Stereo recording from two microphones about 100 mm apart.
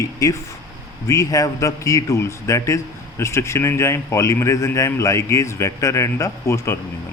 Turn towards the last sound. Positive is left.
turn(degrees=30)  # may be behind; listen again after turning